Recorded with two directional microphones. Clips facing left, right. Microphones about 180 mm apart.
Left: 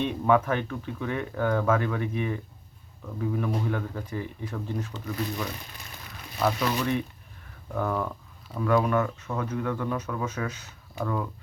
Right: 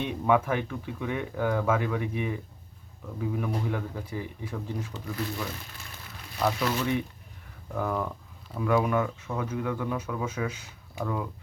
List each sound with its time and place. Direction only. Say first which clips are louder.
0.0 s speech: left 2 dB; 10° right (ahead or behind)
5.2 s speech: left 2 dB; 20° left (ahead or behind)
7.8 s speech: left 1 dB; 5° right (ahead or behind)